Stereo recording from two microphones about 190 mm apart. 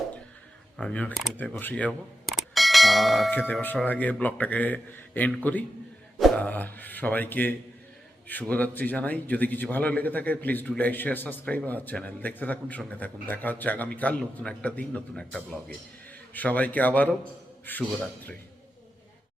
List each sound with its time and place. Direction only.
0.8 s a man's voice: 5° left (ahead or behind)